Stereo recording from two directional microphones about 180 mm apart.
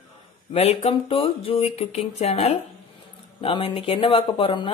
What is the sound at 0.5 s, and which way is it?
Speech, 35° left (ahead or behind).